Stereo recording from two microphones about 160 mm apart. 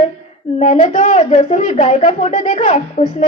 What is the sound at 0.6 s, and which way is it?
A woman's voice, 50° left (ahead or behind).